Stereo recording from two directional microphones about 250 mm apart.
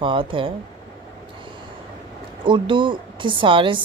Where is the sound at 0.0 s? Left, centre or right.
Right.